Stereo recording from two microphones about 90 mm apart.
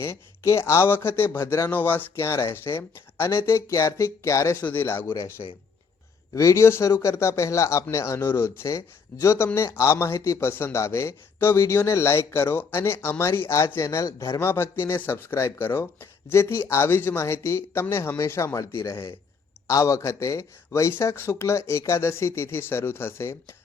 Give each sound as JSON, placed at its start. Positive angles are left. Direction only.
{"t": 0.0, "sound": "speech", "side_deg": 30}
{"t": 1.7, "sound": "speech", "side_deg": 20}
{"t": 2.2, "sound": "speech", "side_deg": 35}
{"t": 4.6, "sound": "speech", "side_deg": 25}
{"t": 6.3, "sound": "speech", "side_deg": 35}